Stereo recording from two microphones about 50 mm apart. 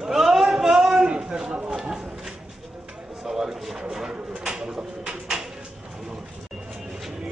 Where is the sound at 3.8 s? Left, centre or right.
Centre.